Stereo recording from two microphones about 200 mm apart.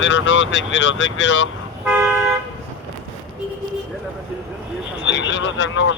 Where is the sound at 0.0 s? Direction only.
70° left (ahead or behind).